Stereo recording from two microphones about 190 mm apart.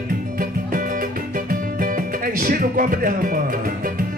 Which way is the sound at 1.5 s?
50° right (ahead or behind).